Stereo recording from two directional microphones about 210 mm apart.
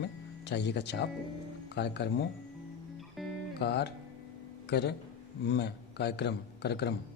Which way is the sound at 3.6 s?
50° left (ahead or behind).